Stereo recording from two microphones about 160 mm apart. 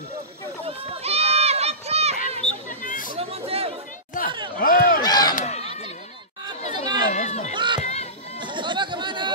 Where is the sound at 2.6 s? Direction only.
55° left (ahead or behind).